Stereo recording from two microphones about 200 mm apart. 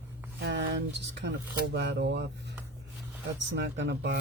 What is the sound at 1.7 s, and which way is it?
Speech, 60° right (ahead or behind).